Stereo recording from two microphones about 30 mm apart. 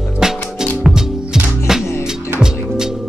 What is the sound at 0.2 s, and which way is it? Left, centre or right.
Music, right.